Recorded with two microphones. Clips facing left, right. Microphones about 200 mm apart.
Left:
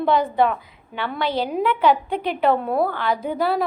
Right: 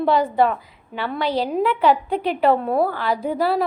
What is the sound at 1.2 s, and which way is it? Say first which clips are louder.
Speech: right 1 dB; 35° right (ahead or behind).